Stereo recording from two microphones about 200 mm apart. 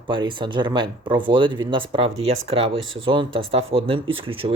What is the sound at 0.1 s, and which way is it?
Speech, 25° right (ahead or behind).